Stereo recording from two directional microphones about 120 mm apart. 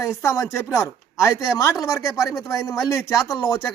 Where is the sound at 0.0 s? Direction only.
25° left (ahead or behind).